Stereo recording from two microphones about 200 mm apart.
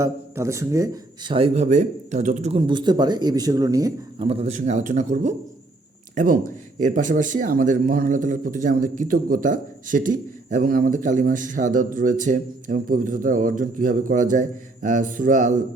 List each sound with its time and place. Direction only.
0.0 s speech: 15° right (ahead or behind)
4.3 s a man's voice: 30° right (ahead or behind)